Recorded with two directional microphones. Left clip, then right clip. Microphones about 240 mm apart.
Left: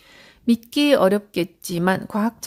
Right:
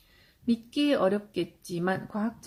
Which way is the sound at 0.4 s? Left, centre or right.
Left.